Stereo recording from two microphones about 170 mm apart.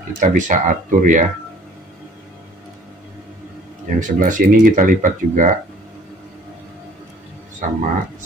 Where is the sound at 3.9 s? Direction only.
50° right (ahead or behind).